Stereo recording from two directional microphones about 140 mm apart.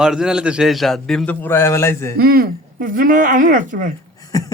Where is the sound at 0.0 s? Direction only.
5° right (ahead or behind); by 2.1 s 20° left (ahead or behind).